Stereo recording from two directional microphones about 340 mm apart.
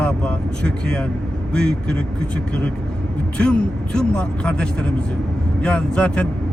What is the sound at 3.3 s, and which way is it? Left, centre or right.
Speech, centre.